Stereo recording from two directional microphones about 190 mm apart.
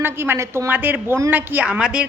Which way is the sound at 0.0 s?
10° right (ahead or behind).